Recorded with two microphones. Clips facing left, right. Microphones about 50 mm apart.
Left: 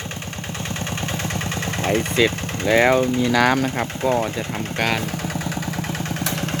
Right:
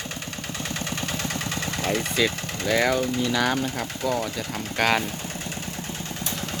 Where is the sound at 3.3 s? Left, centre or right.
Left.